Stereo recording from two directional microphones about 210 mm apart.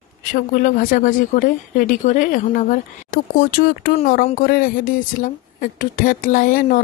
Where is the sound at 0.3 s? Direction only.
40° left (ahead or behind).